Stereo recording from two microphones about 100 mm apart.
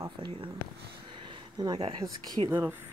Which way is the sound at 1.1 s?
60° right (ahead or behind).